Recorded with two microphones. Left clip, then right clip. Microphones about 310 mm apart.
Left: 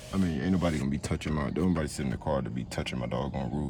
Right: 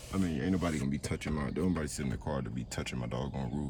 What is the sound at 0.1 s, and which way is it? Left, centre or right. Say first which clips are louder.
Speech: left 3 dB; centre.